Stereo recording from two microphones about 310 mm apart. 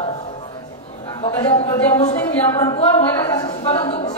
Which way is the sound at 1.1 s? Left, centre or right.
Centre.